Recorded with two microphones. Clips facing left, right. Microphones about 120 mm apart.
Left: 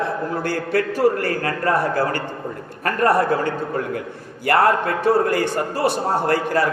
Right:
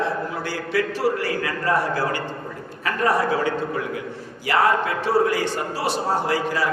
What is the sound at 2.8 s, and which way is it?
A man's voice, 50° left (ahead or behind).